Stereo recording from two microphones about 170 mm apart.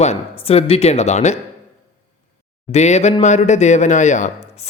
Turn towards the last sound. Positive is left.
turn(degrees=40)  # may be behind; listen again after turning